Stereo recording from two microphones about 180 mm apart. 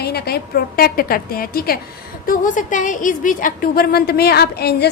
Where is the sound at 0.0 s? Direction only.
60° left (ahead or behind).